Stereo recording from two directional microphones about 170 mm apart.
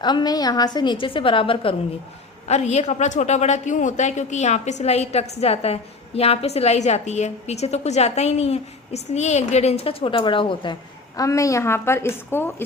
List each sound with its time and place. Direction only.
0.0 s a woman's voice: 25° left (ahead or behind)
11.2 s a woman's voice: 20° left (ahead or behind)